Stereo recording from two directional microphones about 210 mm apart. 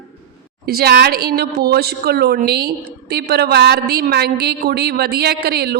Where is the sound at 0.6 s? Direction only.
50° right (ahead or behind).